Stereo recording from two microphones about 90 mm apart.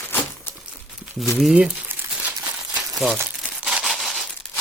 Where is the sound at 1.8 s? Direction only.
20° right (ahead or behind).